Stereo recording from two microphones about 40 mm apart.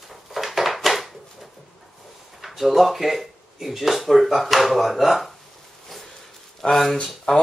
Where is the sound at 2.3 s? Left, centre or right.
Centre.